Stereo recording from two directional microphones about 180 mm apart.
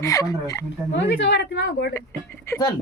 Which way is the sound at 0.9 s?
85° left.